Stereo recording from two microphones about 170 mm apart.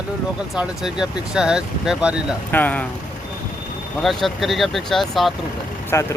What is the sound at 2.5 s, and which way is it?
Speech, 10° left (ahead or behind).